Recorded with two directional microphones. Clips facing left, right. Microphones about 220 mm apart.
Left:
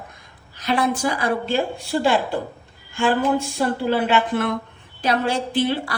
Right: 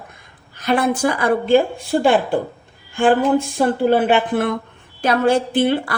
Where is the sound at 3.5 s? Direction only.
50° right (ahead or behind).